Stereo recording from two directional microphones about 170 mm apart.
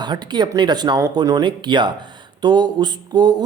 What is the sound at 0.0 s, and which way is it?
Speech, 25° right (ahead or behind).